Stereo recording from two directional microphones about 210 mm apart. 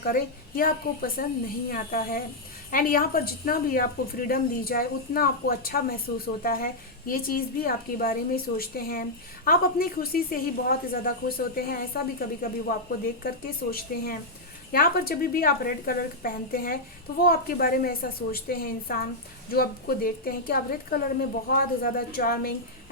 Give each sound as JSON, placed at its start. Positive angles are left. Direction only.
{"t": 0.0, "sound": "a woman's voice", "side_deg": 45}
{"t": 13.2, "sound": "a woman's voice", "side_deg": 45}